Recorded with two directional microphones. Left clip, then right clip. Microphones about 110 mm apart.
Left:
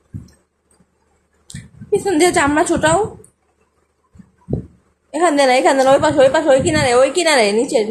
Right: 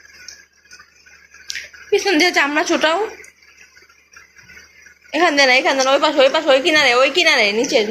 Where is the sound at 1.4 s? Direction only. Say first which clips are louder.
Right 1 dB; 30° left (ahead or behind).